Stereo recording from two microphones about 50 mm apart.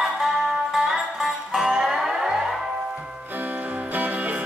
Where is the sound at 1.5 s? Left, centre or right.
Centre.